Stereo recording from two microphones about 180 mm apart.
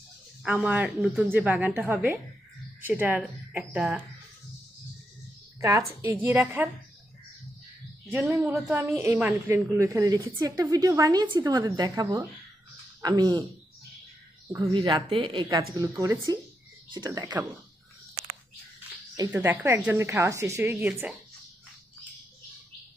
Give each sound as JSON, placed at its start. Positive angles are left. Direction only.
{"t": 0.4, "sound": "a woman's voice", "side_deg": -10}
{"t": 5.5, "sound": "a woman's voice", "side_deg": -15}
{"t": 8.1, "sound": "a woman's voice", "side_deg": -10}
{"t": 14.5, "sound": "a woman's voice", "side_deg": -20}
{"t": 19.3, "sound": "a woman's voice", "side_deg": -15}